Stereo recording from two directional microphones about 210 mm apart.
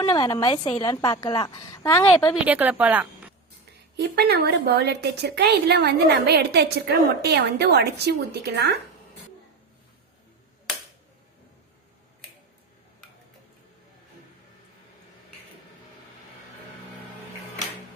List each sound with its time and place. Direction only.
0.0 s a woman's voice: 20° left (ahead or behind)
2.3 s a woman's voice: 10° right (ahead or behind)
3.9 s a woman's voice: 50° right (ahead or behind)